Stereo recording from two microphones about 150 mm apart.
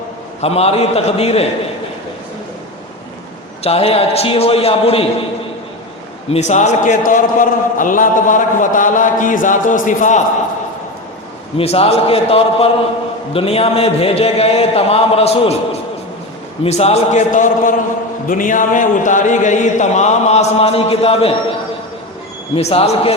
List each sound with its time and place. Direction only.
0.4 s speech: 45° left (ahead or behind)
3.6 s speech: 40° left (ahead or behind)
6.3 s a man's voice: 50° left (ahead or behind)
11.5 s speech: 40° left (ahead or behind)
16.6 s speech: 45° left (ahead or behind)
22.5 s speech: 40° left (ahead or behind)